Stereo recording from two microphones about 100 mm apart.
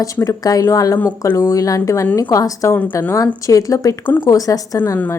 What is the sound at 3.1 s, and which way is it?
A woman's voice, 35° left (ahead or behind).